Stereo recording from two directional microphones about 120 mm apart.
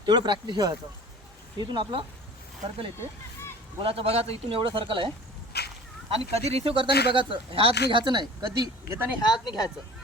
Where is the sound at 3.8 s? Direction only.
50° right (ahead or behind).